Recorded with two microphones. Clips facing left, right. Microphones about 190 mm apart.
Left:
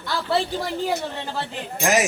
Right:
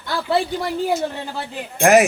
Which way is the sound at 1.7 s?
60° right (ahead or behind).